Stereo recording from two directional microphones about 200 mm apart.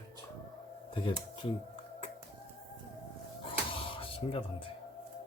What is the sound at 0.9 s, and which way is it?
Speech, 25° left (ahead or behind).